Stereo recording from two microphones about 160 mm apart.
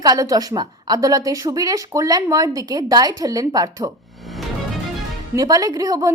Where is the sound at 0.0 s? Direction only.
25° right (ahead or behind).